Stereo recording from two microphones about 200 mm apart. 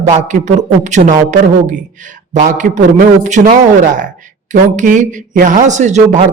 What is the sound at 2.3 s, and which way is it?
Speech, 40° right (ahead or behind).